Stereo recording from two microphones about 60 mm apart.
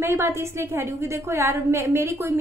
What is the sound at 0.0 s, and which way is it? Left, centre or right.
A woman's voice, right.